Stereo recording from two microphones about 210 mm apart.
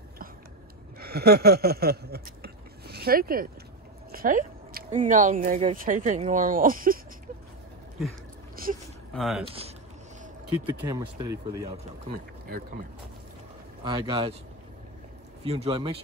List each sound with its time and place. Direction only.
0.9 s a sound: 45° right (ahead or behind)
4.1 s speech: 40° right (ahead or behind)
8.6 s a sound: 45° right (ahead or behind)
9.1 s speech: centre (ahead or behind)
10.6 s speech: 20° right (ahead or behind)
11.7 s speech: 40° right (ahead or behind)
13.8 s speech: 20° right (ahead or behind)
15.4 s speech: 25° right (ahead or behind)